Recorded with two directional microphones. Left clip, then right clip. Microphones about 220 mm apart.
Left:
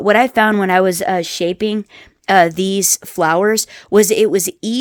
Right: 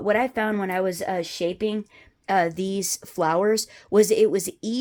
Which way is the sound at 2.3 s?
35° left (ahead or behind).